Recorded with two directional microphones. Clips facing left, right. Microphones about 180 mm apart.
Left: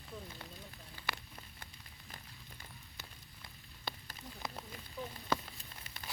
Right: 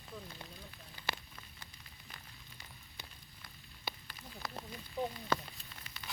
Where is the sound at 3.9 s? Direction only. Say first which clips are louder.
Even; 5° right (ahead or behind).